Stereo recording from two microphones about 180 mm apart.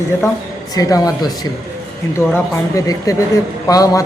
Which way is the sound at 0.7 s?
20° left (ahead or behind).